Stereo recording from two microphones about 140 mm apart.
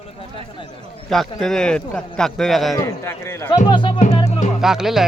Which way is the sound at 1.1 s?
Centre (ahead or behind).